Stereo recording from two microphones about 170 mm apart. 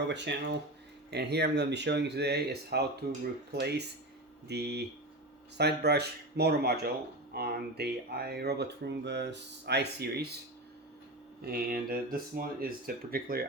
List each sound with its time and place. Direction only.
0.1 s speech: 90° right
1.1 s speech: 75° right (ahead or behind)
11.4 s speech: 65° right (ahead or behind)